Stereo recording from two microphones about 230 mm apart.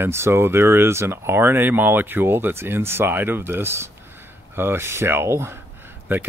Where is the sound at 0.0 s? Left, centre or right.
Centre.